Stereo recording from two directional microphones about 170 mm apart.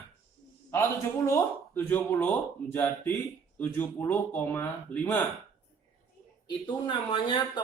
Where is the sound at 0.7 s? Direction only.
15° left (ahead or behind).